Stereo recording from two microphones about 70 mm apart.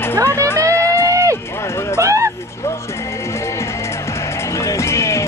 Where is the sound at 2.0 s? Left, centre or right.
Right.